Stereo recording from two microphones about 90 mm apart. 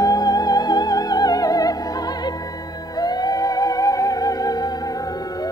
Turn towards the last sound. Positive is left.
turn(degrees=45)  # may be behind; listen again after turning